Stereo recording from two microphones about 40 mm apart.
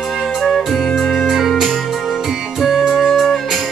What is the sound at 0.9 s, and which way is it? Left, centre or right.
Music, centre.